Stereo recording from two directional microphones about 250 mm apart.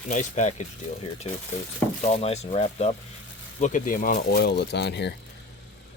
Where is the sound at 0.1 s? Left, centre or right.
Left.